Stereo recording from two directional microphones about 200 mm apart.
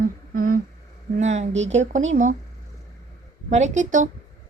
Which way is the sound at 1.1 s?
35° right (ahead or behind).